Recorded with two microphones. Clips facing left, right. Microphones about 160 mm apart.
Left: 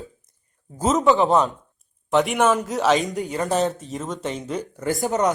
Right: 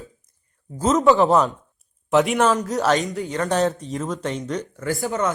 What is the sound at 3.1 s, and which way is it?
Speech, 15° left (ahead or behind).